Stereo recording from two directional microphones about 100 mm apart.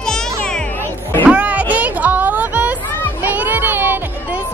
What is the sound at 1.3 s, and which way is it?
Music, 15° right (ahead or behind).